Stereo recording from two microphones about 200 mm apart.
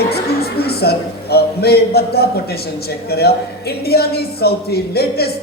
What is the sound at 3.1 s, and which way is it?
A man's voice, 50° left (ahead or behind).